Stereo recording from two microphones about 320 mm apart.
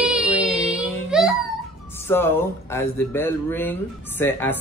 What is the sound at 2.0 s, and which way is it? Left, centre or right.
Speech, centre.